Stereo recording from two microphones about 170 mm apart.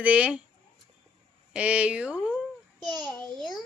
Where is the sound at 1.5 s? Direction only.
5° right (ahead or behind).